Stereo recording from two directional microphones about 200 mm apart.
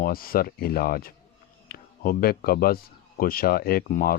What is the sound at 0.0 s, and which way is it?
Speech, 45° left (ahead or behind).